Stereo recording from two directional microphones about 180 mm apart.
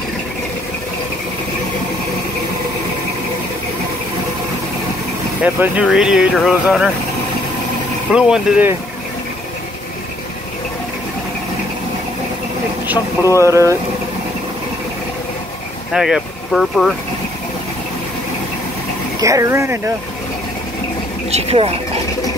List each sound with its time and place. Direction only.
5.4 s speech: 10° right (ahead or behind)
8.1 s speech: 5° right (ahead or behind)
13.4 s speech: 15° right (ahead or behind)
15.9 s speech: 5° right (ahead or behind)
19.2 s speech: 15° right (ahead or behind)
21.3 s speech: 35° right (ahead or behind)